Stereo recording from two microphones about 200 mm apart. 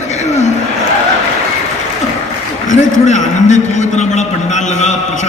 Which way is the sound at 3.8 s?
35° left (ahead or behind).